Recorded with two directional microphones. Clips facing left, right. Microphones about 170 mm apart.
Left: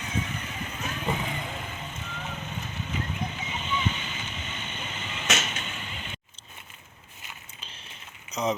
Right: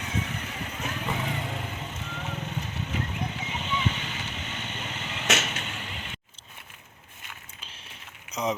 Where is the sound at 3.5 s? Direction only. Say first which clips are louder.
Even; 75° right (ahead or behind).